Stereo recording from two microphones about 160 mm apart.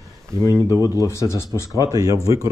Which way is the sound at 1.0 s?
20° left (ahead or behind).